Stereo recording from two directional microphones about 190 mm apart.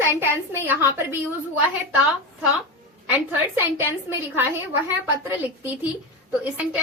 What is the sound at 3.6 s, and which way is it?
Speech, 10° right (ahead or behind).